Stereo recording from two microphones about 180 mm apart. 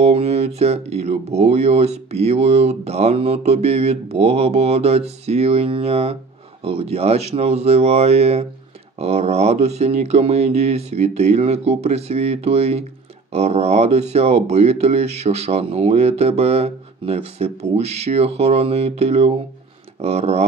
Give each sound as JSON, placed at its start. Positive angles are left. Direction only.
{"t": 0.0, "sound": "speech", "side_deg": -35}